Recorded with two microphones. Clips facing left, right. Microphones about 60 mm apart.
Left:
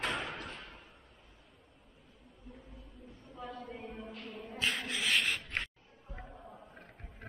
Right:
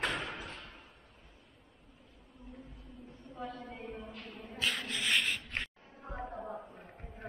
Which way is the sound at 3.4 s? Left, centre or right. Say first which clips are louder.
Even; centre.